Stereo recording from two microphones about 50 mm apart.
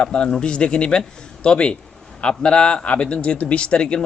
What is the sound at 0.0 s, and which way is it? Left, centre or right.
Speech, left.